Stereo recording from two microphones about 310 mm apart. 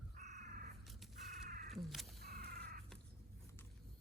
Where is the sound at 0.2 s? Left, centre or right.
Right.